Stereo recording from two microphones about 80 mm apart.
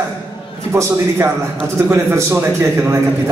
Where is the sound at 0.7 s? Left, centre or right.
Right.